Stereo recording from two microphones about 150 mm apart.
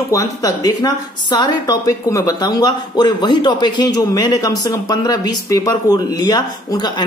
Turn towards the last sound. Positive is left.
turn(degrees=30)  # may be behind; listen again after turning